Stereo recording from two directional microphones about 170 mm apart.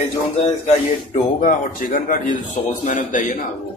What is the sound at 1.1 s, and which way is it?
Speech, 55° left (ahead or behind).